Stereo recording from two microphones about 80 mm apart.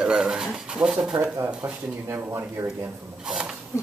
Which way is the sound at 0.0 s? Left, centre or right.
Centre.